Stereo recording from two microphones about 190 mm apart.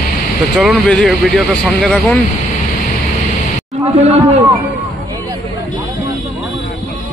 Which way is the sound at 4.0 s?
35° right (ahead or behind).